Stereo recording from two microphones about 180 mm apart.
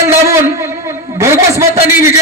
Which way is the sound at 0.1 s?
15° right (ahead or behind).